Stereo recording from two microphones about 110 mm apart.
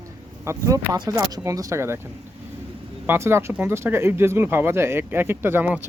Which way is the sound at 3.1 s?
25° right (ahead or behind).